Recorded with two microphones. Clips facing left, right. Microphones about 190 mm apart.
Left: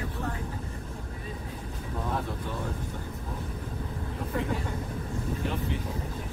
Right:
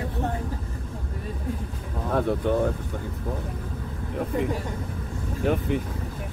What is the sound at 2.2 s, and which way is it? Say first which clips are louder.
Speech: right 11 dB; 60° right (ahead or behind).